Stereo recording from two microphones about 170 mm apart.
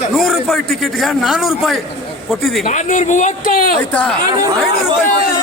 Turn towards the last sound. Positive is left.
turn(degrees=55)  # may be behind; listen again after turning